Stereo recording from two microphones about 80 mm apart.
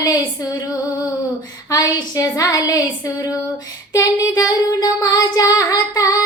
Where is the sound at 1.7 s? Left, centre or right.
Left.